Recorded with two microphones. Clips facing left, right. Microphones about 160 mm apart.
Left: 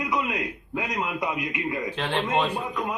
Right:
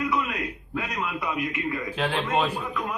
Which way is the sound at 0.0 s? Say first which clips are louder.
Even; 20° left (ahead or behind).